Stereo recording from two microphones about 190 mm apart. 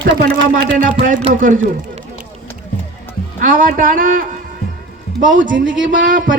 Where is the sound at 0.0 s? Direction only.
50° right (ahead or behind).